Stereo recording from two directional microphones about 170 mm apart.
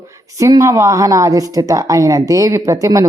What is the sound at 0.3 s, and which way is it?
A woman's voice, 20° right (ahead or behind).